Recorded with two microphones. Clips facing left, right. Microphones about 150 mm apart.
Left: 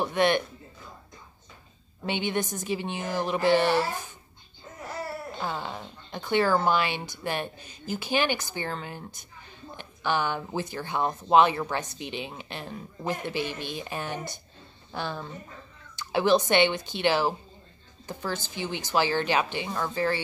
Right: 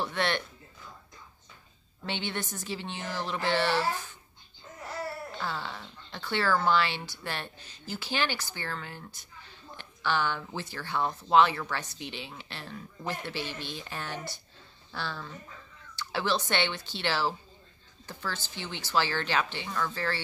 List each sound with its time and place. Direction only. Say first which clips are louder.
0.0 s a sound: left 7 dB; 15° left (ahead or behind)
2.0 s speech: left 6 dB; 15° left (ahead or behind)
5.4 s speech: left 3 dB; 15° left (ahead or behind)